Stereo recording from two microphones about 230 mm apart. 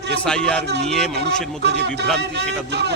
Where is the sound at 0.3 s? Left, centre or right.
Centre.